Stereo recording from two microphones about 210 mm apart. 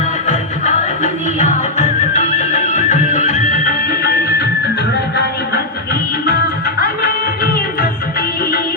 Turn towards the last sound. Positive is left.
turn(degrees=45)  # may be behind; listen again after turning